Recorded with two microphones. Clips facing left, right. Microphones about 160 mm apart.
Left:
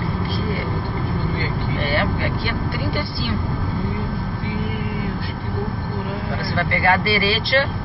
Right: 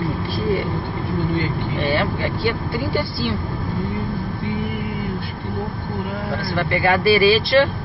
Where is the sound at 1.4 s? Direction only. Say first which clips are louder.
Right 2 dB; 20° right (ahead or behind).